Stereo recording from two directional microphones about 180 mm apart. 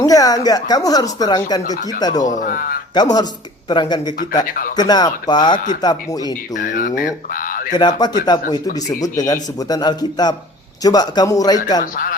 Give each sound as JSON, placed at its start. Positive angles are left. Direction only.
{"t": 0.0, "sound": "a man's voice", "side_deg": 20}
{"t": 1.6, "sound": "speech", "side_deg": 40}
{"t": 2.0, "sound": "a man's voice", "side_deg": 20}
{"t": 2.2, "sound": "speech", "side_deg": 45}
{"t": 2.9, "sound": "a man's voice", "side_deg": 20}
{"t": 6.5, "sound": "speech", "side_deg": 45}
{"t": 7.7, "sound": "a man's voice", "side_deg": 25}
{"t": 11.8, "sound": "speech", "side_deg": 50}